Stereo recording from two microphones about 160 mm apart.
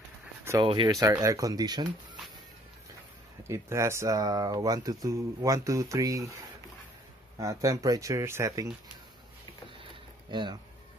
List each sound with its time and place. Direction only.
0.7 s speech: 25° right (ahead or behind)
3.4 s speech: 20° right (ahead or behind)
7.3 s speech: 20° right (ahead or behind)
10.3 s speech: 30° right (ahead or behind)